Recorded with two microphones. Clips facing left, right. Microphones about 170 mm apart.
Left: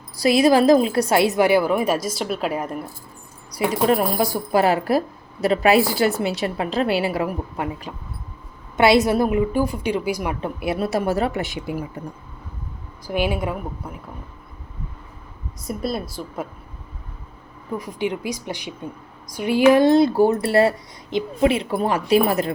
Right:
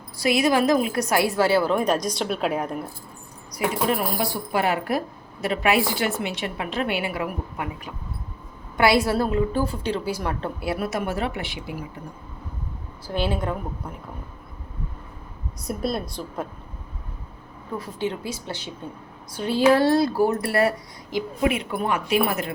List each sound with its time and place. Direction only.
0.2 s a woman's voice: 35° left (ahead or behind); by 2.9 s centre (ahead or behind)
3.5 s speech: 35° left (ahead or behind)
8.8 s a woman's voice: 20° left (ahead or behind)
10.8 s speech: 35° left (ahead or behind)
13.1 s a woman's voice: 15° left (ahead or behind)
15.6 s a woman's voice: centre (ahead or behind)
17.7 s a woman's voice: 15° left (ahead or behind); by 22.5 s 35° left (ahead or behind)